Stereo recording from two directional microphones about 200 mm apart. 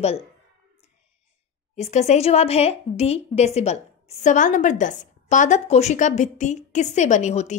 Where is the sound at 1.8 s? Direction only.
35° left (ahead or behind).